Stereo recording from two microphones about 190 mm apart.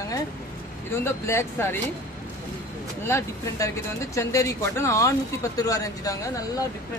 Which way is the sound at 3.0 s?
15° left (ahead or behind).